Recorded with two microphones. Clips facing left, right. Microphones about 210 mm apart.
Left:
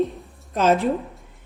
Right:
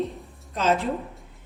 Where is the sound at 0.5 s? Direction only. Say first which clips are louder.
Left 4 dB; 50° left (ahead or behind).